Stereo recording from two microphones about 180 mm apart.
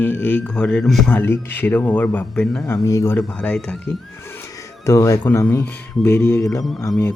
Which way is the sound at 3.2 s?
5° left (ahead or behind).